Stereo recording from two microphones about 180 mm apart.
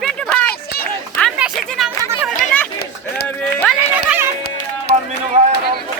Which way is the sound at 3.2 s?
10° left (ahead or behind).